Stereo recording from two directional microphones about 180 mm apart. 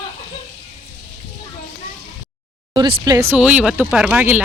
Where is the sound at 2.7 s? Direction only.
25° right (ahead or behind).